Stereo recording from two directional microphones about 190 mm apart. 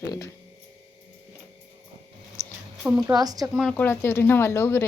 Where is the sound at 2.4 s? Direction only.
15° left (ahead or behind).